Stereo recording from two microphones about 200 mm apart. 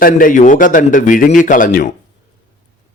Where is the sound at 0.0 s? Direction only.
45° left (ahead or behind).